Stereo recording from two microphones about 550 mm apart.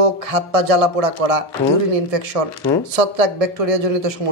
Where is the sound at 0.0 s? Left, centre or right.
Right.